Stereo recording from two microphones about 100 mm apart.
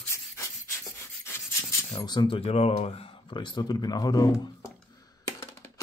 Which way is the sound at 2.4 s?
90° left.